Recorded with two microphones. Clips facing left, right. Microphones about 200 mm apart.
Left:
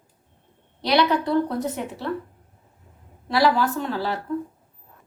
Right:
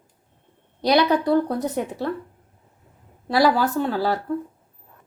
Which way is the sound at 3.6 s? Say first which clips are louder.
Right 3 dB; 40° right (ahead or behind).